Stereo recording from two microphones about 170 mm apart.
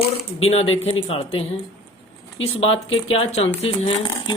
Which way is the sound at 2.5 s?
35° left (ahead or behind).